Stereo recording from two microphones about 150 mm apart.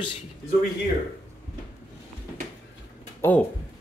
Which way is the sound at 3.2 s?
15° left (ahead or behind).